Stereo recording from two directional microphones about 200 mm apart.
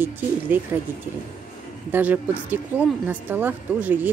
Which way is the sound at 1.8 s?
10° right (ahead or behind).